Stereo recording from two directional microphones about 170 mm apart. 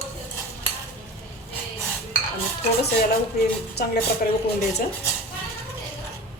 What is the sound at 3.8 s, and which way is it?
Speech, 65° left (ahead or behind).